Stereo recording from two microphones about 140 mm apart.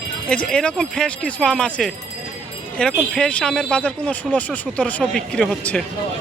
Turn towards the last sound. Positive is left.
turn(degrees=5)  # may be behind; listen again after turning